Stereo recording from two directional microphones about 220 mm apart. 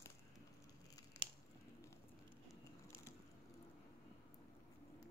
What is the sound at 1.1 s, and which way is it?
Scissors, 15° left (ahead or behind).